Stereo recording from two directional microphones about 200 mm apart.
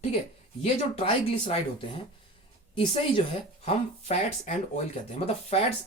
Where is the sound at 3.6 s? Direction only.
35° left (ahead or behind).